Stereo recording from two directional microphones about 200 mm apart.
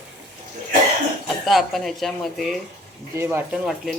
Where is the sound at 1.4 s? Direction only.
Centre (ahead or behind).